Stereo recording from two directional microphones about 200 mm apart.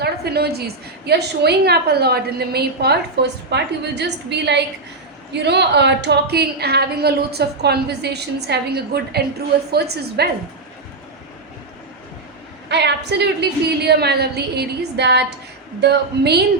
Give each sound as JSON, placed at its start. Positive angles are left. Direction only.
{"t": 0.0, "sound": "a sound", "side_deg": -55}
{"t": 1.0, "sound": "a woman's voice", "side_deg": -55}
{"t": 12.6, "sound": "a woman's voice", "side_deg": -60}